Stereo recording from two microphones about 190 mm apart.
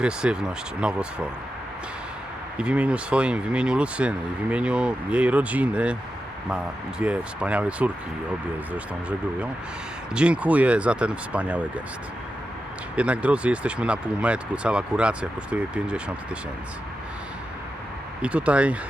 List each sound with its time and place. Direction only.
0.0 s speech: 5° right (ahead or behind)
2.6 s speech: 5° right (ahead or behind)
7.0 s speech: 5° right (ahead or behind)
10.2 s speech: 5° right (ahead or behind)
13.0 s speech: 5° right (ahead or behind)
18.2 s speech: 5° right (ahead or behind)